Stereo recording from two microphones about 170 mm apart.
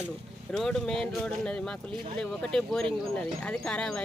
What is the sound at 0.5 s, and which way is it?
Speech, 5° left (ahead or behind).